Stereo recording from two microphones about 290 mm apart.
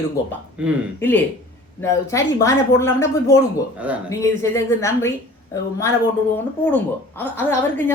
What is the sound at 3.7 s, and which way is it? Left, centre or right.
Speech, centre.